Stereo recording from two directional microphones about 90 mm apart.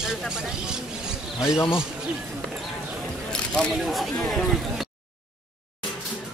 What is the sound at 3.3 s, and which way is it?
Single-lens reflex camera, 10° left (ahead or behind).